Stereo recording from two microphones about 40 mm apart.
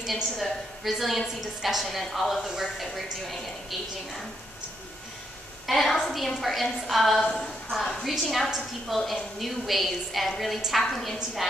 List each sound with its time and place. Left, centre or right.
0.0 s a woman's voice: centre
5.7 s a woman's voice: centre
7.2 s a woman's voice: centre
7.7 s a woman's voice: centre